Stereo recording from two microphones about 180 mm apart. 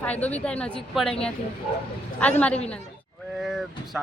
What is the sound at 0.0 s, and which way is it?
A woman's voice, 10° left (ahead or behind).